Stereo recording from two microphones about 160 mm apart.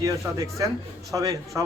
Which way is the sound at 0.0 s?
20° right (ahead or behind).